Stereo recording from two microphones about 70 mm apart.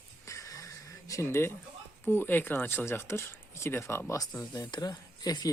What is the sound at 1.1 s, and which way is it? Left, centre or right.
Speech, left.